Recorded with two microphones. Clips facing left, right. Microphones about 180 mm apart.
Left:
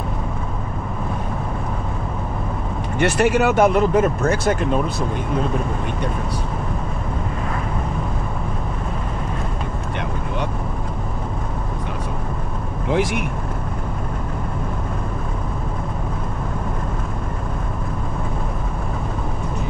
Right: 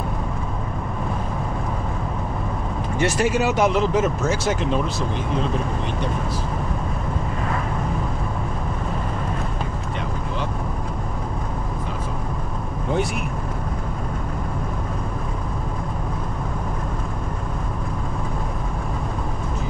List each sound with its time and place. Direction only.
3.0 s speech: 60° left (ahead or behind)
12.9 s speech: 85° left